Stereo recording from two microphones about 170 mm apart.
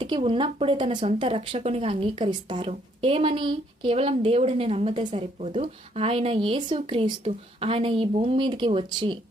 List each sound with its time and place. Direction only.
0.0 s speech: 30° right (ahead or behind)